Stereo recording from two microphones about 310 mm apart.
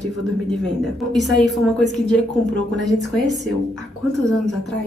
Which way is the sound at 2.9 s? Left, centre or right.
Right.